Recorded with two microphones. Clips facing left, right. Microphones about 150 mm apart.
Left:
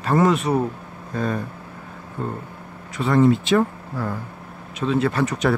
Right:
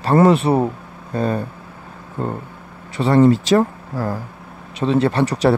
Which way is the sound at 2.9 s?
30° right (ahead or behind).